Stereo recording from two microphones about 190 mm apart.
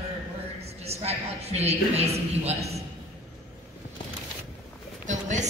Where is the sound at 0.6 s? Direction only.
35° right (ahead or behind).